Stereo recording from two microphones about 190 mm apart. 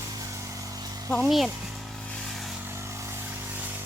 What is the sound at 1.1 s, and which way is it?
Speech, centre (ahead or behind).